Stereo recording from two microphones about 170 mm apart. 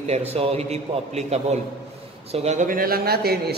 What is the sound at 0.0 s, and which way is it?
A man's voice, 40° right (ahead or behind).